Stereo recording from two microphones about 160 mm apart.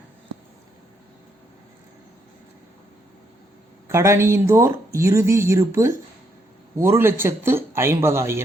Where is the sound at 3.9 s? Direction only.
15° right (ahead or behind).